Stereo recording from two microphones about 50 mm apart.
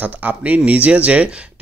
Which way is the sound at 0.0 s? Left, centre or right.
Right.